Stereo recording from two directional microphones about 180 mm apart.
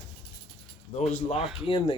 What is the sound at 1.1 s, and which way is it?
Speech, 35° left (ahead or behind).